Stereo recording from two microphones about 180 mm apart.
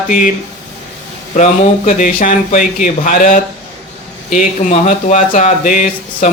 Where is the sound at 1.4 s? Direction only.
45° left (ahead or behind).